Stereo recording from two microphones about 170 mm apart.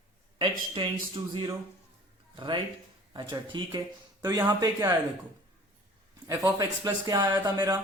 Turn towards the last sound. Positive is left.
turn(degrees=-20)  # may be behind; listen again after turning